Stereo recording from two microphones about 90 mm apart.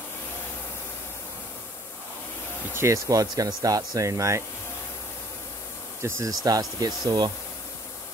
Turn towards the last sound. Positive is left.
turn(degrees=-45)  # may be behind; listen again after turning